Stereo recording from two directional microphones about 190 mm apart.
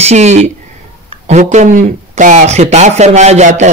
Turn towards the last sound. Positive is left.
turn(degrees=-40)  # may be behind; listen again after turning